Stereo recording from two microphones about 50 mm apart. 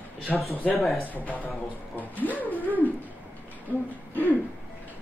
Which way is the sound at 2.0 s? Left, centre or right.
Left.